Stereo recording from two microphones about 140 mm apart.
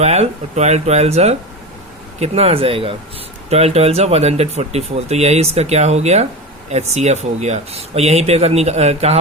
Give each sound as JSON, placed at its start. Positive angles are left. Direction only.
{"t": 0.0, "sound": "speech", "side_deg": -50}